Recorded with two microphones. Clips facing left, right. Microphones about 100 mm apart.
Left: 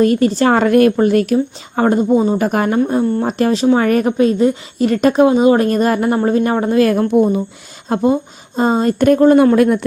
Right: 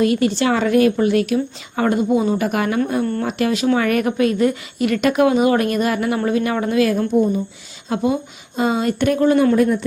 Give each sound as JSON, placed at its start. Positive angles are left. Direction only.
{"t": 0.0, "sound": "a woman's voice", "side_deg": 40}
{"t": 3.0, "sound": "speech", "side_deg": 15}
{"t": 3.2, "sound": "a woman's voice", "side_deg": 35}
{"t": 7.1, "sound": "speech", "side_deg": 65}
{"t": 7.9, "sound": "a woman's voice", "side_deg": 40}
{"t": 9.6, "sound": "speech", "side_deg": 70}